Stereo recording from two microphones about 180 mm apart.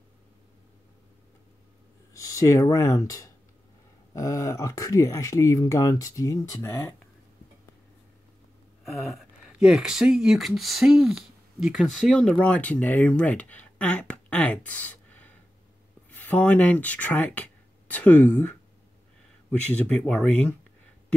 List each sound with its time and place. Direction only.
2.1 s speech: 20° left (ahead or behind)
8.8 s speech: centre (ahead or behind)
19.7 s speech: 5° left (ahead or behind)